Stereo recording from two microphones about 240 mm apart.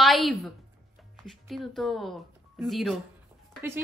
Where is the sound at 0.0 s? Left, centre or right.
Centre.